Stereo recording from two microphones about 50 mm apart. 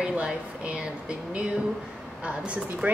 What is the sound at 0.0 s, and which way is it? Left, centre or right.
A woman's voice, right.